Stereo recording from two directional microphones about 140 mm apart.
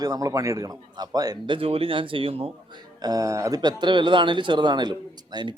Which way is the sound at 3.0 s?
25° right (ahead or behind).